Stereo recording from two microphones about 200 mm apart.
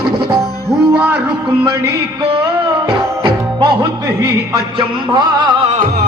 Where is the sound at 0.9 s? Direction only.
5° right (ahead or behind).